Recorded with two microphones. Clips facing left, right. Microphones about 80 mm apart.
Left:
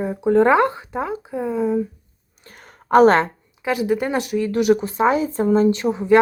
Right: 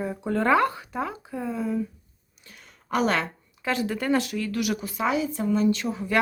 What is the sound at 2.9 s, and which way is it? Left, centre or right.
Speech, left.